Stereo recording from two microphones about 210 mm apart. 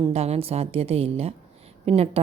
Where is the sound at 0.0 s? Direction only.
30° right (ahead or behind).